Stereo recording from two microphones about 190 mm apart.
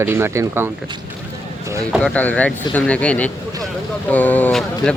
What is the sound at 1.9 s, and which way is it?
Speech, 5° left (ahead or behind).